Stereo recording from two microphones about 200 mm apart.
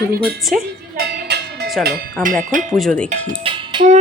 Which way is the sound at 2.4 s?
40° right (ahead or behind).